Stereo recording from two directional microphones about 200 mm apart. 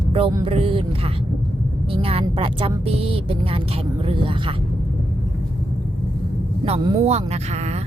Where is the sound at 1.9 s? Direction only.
30° right (ahead or behind).